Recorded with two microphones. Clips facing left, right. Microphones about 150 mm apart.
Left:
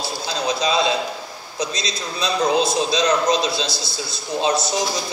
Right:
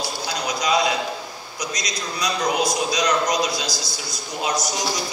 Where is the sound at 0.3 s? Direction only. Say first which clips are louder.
Left 1 dB; 25° left (ahead or behind).